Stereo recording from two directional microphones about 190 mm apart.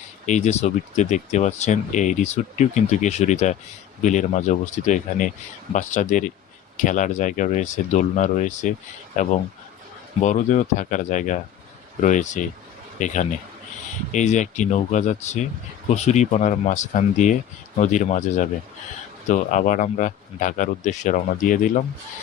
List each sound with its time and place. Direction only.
0.3 s speech: 40° left (ahead or behind)